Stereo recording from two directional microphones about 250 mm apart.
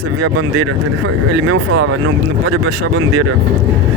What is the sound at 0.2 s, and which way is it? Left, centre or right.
Speech, right.